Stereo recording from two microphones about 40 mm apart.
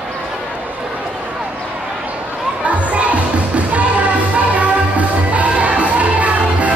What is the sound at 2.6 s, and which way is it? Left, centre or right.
Music, right.